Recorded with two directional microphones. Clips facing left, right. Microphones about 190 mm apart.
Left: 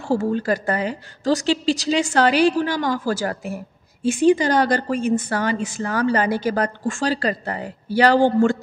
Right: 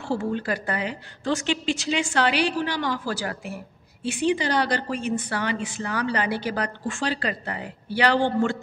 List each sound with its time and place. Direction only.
0.1 s a woman's voice: 40° left (ahead or behind)